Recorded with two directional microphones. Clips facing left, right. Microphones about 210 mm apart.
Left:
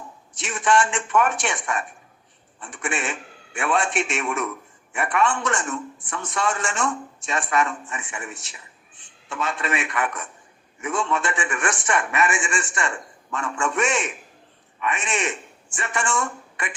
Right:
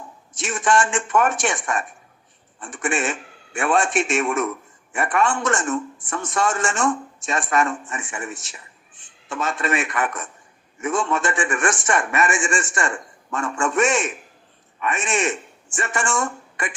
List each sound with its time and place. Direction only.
0.3 s a man's voice: 45° right (ahead or behind)